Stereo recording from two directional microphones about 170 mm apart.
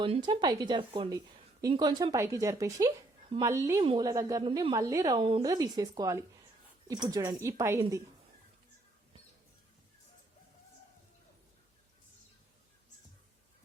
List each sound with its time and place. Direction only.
0.0 s a woman's voice: 30° right (ahead or behind)